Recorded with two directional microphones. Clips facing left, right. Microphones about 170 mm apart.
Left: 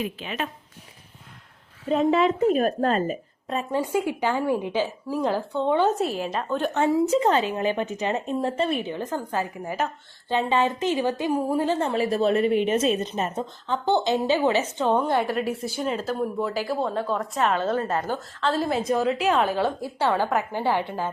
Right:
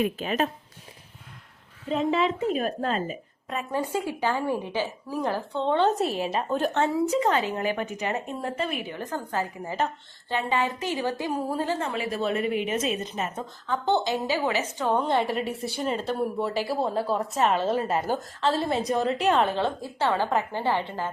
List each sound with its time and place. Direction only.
0.0 s speech: 45° right (ahead or behind)
1.9 s a woman's voice: 50° left (ahead or behind)
3.4 s a woman's voice: 30° left (ahead or behind)
3.9 s a woman's voice: 15° left (ahead or behind)
6.0 s a woman's voice: centre (ahead or behind)
7.1 s a woman's voice: 30° left (ahead or behind)
8.4 s a woman's voice: 30° left (ahead or behind)
11.8 s a woman's voice: 35° left (ahead or behind)
14.9 s a woman's voice: centre (ahead or behind)
17.0 s a woman's voice: 35° right (ahead or behind)
17.3 s a woman's voice: centre (ahead or behind)